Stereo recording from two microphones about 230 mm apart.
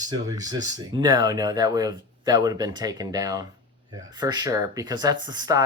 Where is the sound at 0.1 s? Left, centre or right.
Centre.